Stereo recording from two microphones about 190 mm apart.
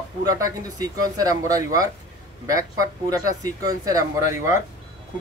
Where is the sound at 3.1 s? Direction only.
20° right (ahead or behind).